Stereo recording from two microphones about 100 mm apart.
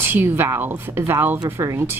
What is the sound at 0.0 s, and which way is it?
Speech, 20° right (ahead or behind).